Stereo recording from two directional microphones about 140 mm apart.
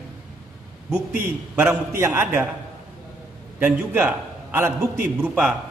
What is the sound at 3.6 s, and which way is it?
A man's voice, 10° right (ahead or behind).